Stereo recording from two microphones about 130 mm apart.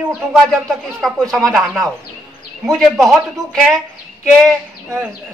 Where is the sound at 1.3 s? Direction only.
5° left (ahead or behind).